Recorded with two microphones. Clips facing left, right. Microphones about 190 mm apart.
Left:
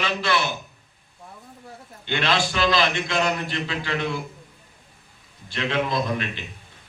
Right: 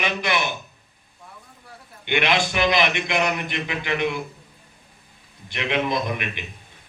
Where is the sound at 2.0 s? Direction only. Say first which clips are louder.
Right 2 dB; 20° right (ahead or behind).